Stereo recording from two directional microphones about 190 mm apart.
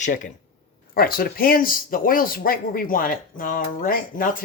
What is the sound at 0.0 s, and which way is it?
Speech, 40° left (ahead or behind).